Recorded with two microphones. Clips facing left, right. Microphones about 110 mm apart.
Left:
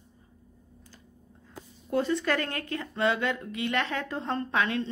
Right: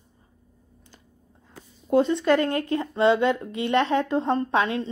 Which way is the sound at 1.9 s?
25° right (ahead or behind).